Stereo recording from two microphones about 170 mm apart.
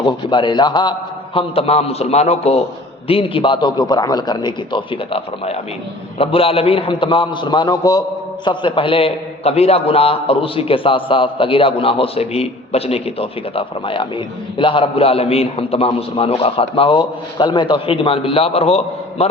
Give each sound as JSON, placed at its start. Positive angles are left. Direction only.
{"t": 0.0, "sound": "a man's voice", "side_deg": 25}